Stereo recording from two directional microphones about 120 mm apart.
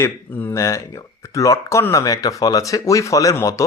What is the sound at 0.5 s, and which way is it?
Speech, 25° left (ahead or behind).